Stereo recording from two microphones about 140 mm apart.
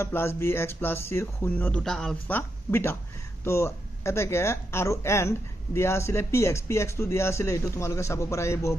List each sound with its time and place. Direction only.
0.0 s speech: 15° left (ahead or behind)